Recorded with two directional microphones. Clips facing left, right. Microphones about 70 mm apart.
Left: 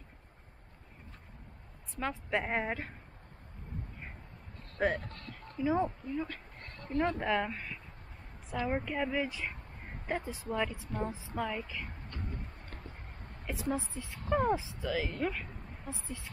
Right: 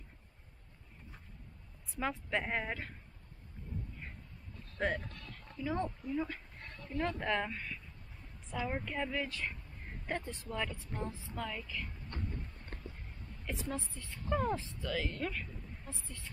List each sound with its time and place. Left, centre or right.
2.0 s speech: centre
2.3 s speech: centre
4.7 s speech: centre
6.0 s speech: centre
7.2 s speech: centre
10.5 s speech: centre
12.7 s a sound: left
13.5 s speech: centre
14.3 s speech: centre
14.8 s speech: centre